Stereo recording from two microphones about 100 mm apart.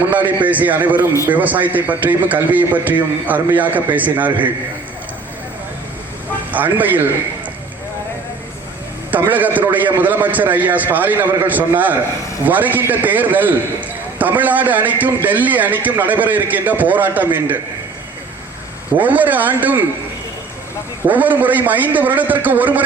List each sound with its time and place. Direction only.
0.1 s a man's voice: 20° right (ahead or behind)
6.5 s a man's voice: 15° right (ahead or behind)
9.1 s a man's voice: 15° right (ahead or behind)
18.9 s a man's voice: 15° right (ahead or behind)
21.1 s a man's voice: 15° right (ahead or behind)